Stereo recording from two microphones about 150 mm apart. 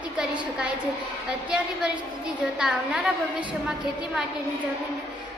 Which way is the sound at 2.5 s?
5° right (ahead or behind).